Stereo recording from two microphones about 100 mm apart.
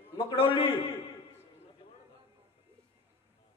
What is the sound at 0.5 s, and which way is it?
Speech, 75° left (ahead or behind).